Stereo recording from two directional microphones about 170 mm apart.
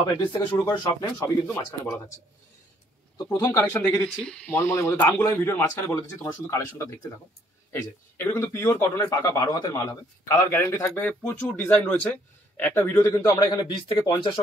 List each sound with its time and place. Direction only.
0.3 s speech: 25° left (ahead or behind)
3.3 s speech: 20° left (ahead or behind)